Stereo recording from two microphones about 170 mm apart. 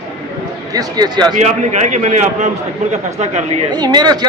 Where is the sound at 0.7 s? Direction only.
25° right (ahead or behind).